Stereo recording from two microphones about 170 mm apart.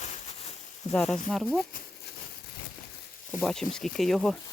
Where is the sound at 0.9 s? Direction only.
5° left (ahead or behind).